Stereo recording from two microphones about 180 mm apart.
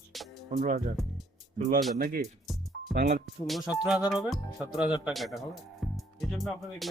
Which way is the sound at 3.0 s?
55° right (ahead or behind).